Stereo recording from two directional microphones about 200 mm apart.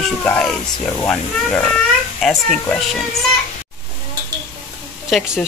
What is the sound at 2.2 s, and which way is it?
Speech, centre (ahead or behind).